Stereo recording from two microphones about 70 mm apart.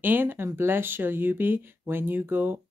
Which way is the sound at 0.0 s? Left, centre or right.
Right.